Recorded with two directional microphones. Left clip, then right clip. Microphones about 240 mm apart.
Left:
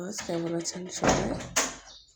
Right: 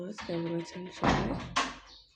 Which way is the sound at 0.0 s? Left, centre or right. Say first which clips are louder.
Left 4 dB; centre.